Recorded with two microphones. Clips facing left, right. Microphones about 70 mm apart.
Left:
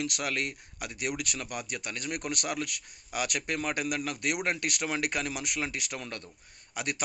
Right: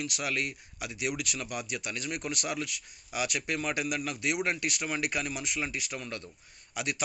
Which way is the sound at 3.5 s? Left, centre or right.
Left.